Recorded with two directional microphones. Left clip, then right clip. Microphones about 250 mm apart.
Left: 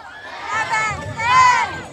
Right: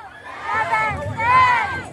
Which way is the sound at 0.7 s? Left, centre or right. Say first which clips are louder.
Even; centre.